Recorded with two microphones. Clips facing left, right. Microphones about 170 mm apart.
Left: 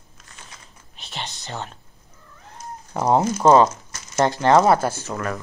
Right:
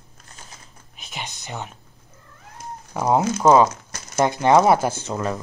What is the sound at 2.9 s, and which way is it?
Speech, 5° right (ahead or behind).